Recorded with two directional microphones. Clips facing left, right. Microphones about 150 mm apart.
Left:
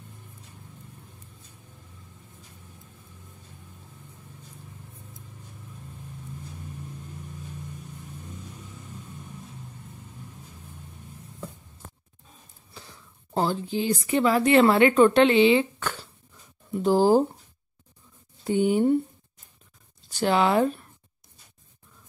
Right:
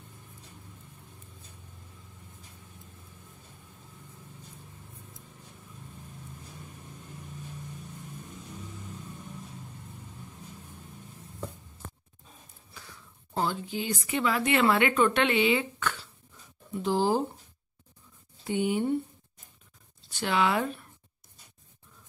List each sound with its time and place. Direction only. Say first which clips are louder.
12.7 s speech: left 3 dB; 30° left (ahead or behind)
18.4 s speech: left 6 dB; 40° left (ahead or behind)
20.1 s speech: left 5 dB; 40° left (ahead or behind)